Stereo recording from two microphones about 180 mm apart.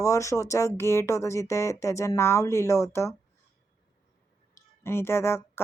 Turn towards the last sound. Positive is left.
turn(degrees=15)  # may be behind; listen again after turning